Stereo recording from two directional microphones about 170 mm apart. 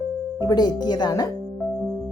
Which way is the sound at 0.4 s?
25° left (ahead or behind).